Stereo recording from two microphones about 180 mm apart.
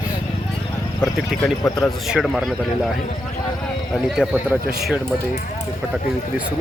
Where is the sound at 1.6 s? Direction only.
20° left (ahead or behind).